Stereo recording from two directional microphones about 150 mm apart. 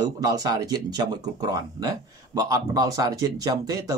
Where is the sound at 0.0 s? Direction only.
25° right (ahead or behind).